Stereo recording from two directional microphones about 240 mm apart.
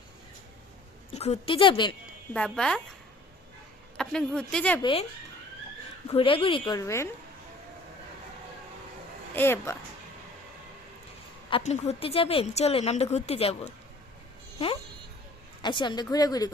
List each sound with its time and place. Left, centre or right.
1.1 s a woman's voice: left
2.3 s speech: centre
3.9 s speech: centre
4.8 s a woman's voice: left
6.1 s a woman's voice: left
9.3 s a woman's voice: centre
11.5 s a woman's voice: left
15.6 s a woman's voice: centre